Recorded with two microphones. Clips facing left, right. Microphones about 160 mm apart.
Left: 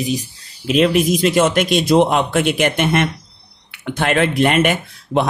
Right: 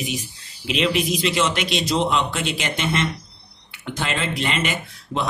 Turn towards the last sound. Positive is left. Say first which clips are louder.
# left 8 dB
turn(degrees=60)  # may be behind; listen again after turning